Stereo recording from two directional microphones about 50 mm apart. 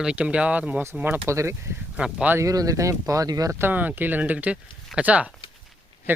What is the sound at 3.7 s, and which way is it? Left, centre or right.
Speech, right.